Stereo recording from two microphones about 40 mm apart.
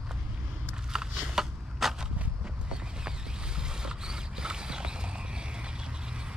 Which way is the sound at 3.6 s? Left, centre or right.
Centre.